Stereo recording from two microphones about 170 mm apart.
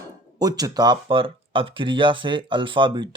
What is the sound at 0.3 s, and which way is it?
Speech, 20° right (ahead or behind).